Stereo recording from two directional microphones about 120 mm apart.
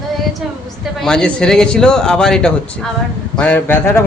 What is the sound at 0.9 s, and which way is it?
A man's voice, 5° left (ahead or behind).